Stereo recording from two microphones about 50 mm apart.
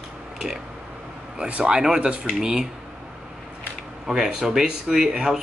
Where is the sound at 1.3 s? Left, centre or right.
Right.